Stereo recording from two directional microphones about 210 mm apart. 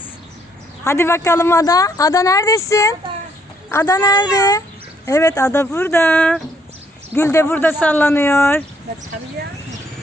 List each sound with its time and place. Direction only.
0.9 s speech: 10° left (ahead or behind)